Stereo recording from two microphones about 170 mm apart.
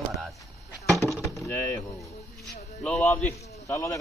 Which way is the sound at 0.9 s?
Centre (ahead or behind).